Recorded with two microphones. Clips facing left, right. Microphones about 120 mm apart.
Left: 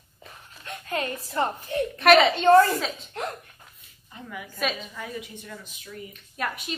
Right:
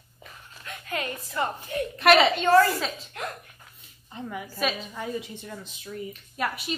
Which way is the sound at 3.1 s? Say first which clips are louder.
Left 3 dB; 30° left (ahead or behind).